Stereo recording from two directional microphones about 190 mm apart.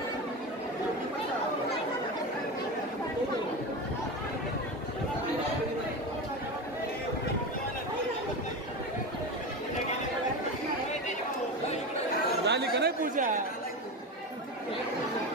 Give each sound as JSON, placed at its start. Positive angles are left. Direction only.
{"t": 12.4, "sound": "chatter", "side_deg": -60}